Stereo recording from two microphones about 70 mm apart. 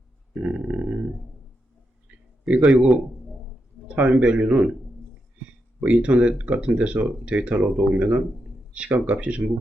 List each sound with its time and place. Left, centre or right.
0.3 s a sound: centre
2.6 s a man's voice: centre
3.8 s a man's voice: centre
5.8 s speech: centre